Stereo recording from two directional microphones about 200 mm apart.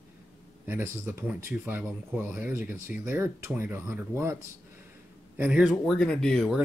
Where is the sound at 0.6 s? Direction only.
10° right (ahead or behind).